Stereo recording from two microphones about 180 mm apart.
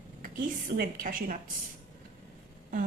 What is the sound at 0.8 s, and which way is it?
Speech, 50° right (ahead or behind).